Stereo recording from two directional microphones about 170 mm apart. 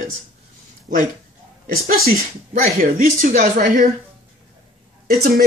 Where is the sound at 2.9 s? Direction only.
50° right (ahead or behind).